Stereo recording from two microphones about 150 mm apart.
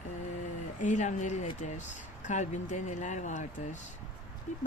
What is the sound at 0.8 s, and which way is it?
Speech, 55° left (ahead or behind).